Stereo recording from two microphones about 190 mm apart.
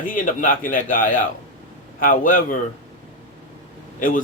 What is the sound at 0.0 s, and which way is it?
A man's voice, 45° left (ahead or behind).